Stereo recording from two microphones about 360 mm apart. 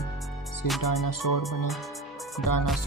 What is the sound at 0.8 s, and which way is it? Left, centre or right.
Speech, left.